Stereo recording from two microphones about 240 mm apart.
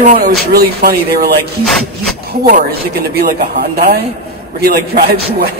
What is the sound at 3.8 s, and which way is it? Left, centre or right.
A man's voice, right.